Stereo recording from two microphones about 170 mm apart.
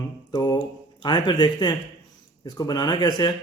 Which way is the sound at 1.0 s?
25° left (ahead or behind).